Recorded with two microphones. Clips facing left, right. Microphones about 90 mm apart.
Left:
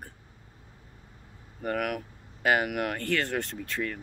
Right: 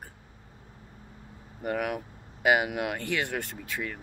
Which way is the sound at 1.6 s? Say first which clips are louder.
Even; 10° right (ahead or behind).